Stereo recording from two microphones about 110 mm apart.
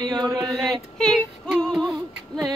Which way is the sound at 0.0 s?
40° right (ahead or behind).